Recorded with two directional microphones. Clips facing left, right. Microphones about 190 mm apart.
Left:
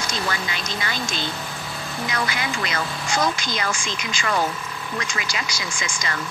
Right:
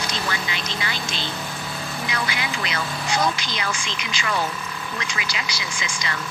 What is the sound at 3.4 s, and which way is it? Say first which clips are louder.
Speech: left 2 dB; 45° left (ahead or behind).